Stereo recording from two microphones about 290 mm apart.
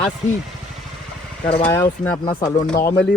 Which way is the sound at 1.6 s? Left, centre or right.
Centre.